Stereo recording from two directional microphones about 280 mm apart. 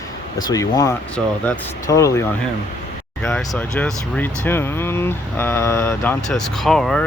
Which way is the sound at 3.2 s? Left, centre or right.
Centre.